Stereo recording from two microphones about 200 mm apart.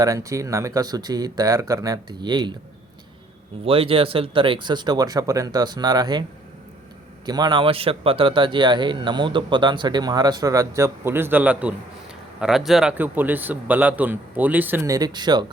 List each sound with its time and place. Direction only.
0.0 s a man's voice: 15° right (ahead or behind)
3.6 s a man's voice: 30° right (ahead or behind)
7.3 s a man's voice: 20° right (ahead or behind)